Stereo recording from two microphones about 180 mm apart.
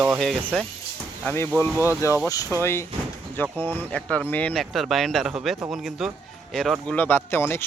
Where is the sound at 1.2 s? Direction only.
15° left (ahead or behind).